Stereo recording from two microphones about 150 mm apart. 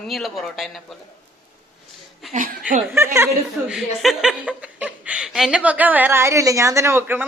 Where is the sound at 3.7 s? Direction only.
5° right (ahead or behind).